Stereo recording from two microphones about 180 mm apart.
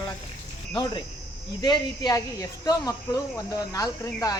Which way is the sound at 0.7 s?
25° left (ahead or behind).